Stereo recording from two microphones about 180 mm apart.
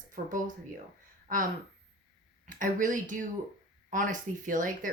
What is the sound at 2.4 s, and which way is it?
Speech, 45° right (ahead or behind).